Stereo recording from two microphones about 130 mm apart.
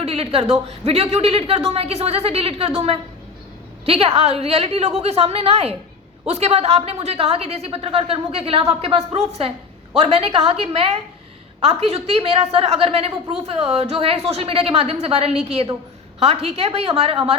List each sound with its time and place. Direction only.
0.0 s a woman's voice: 50° right (ahead or behind)